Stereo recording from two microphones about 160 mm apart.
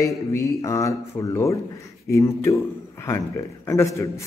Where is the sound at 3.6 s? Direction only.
15° left (ahead or behind).